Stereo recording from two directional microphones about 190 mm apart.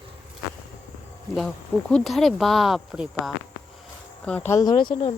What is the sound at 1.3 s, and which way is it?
Speech, 5° left (ahead or behind).